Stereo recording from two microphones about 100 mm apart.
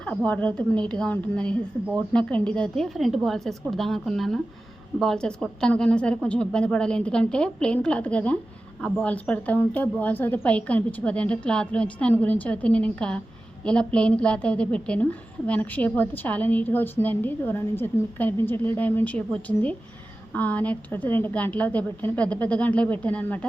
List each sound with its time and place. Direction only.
0.3 s a woman's voice: 10° left (ahead or behind)